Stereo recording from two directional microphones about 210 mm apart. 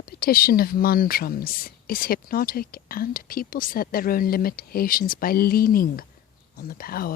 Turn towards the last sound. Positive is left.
turn(degrees=45)  # may be behind; listen again after turning